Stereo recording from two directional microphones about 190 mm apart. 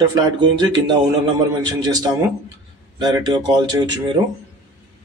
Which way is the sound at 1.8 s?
20° right (ahead or behind).